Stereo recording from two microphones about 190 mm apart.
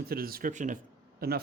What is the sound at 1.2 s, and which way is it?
Speech, 55° right (ahead or behind).